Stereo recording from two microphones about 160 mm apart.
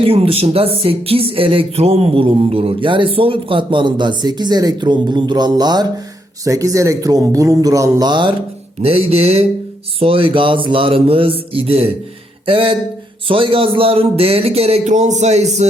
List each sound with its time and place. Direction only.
0.0 s speech: 40° right (ahead or behind)